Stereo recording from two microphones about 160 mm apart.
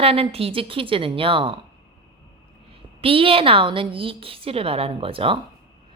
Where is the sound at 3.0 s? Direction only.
35° right (ahead or behind).